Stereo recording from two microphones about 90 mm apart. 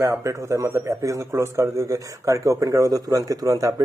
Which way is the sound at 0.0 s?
35° right (ahead or behind).